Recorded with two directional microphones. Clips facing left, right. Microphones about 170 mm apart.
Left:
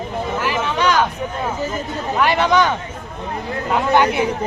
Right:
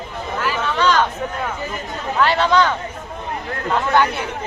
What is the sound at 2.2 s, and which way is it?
Speech, 15° left (ahead or behind).